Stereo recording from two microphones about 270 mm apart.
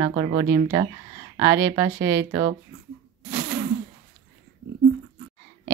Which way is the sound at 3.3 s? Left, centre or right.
Right.